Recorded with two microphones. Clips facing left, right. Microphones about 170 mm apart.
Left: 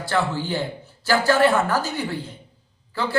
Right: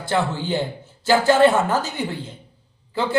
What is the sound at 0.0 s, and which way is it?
A man's voice, 20° right (ahead or behind).